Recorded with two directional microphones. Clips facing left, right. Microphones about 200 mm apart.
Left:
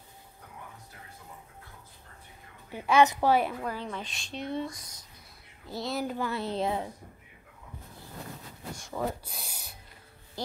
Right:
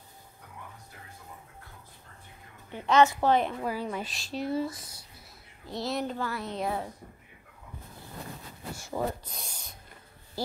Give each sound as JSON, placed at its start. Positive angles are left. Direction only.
{"t": 2.7, "sound": "a woman's voice", "side_deg": 15}
{"t": 3.6, "sound": "speech", "side_deg": -10}
{"t": 6.1, "sound": "a woman's voice", "side_deg": 15}
{"t": 6.4, "sound": "a woman's voice", "side_deg": 30}
{"t": 8.7, "sound": "speech", "side_deg": -5}
{"t": 9.2, "sound": "a sound", "side_deg": 10}